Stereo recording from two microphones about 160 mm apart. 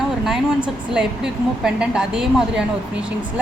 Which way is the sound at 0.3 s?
5° right (ahead or behind).